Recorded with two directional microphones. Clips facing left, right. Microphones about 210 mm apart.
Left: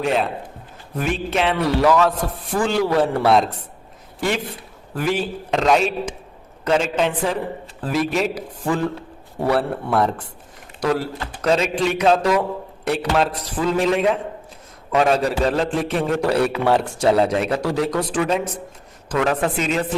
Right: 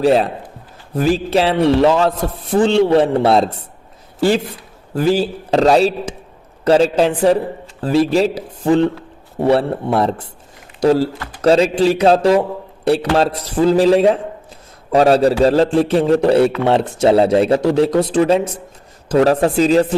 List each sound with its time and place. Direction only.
0.0 s a man's voice: 35° right (ahead or behind)
4.9 s a man's voice: 30° right (ahead or behind)